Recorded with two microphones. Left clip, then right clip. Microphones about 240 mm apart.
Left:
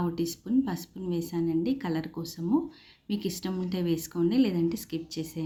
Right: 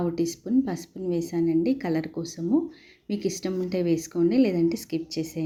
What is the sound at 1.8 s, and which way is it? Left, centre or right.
Speech, centre.